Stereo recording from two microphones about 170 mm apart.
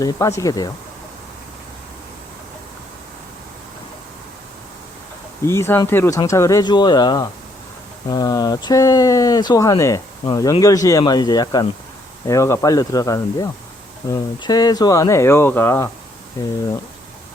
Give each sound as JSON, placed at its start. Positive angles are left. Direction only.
{"t": 0.0, "sound": "speech", "side_deg": 15}
{"t": 5.5, "sound": "speech", "side_deg": 15}